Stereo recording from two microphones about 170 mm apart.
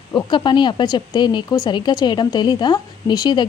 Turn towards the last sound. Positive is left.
turn(degrees=25)  # may be behind; listen again after turning